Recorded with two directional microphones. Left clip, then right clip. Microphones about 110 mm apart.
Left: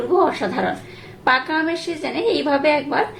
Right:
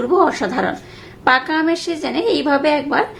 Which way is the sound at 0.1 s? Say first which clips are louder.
Right 2 dB; 40° right (ahead or behind).